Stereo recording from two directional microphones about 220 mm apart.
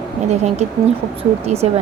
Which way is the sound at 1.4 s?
30° right (ahead or behind).